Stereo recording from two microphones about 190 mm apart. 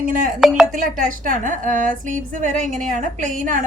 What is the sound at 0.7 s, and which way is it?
A woman's voice, 45° right (ahead or behind).